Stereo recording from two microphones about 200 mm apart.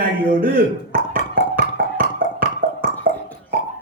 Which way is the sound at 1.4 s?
45° right (ahead or behind).